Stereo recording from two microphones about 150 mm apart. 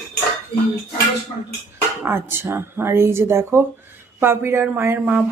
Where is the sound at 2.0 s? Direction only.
15° right (ahead or behind).